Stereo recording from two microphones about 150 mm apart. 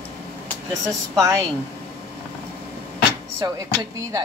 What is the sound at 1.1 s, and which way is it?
Speech, 20° right (ahead or behind).